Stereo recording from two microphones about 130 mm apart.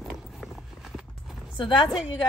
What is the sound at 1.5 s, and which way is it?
Speech, 40° left (ahead or behind).